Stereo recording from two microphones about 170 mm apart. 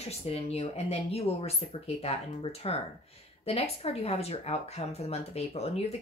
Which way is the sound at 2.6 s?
35° left (ahead or behind).